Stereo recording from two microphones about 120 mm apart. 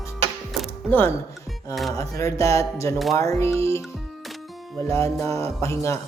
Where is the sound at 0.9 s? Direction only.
15° left (ahead or behind).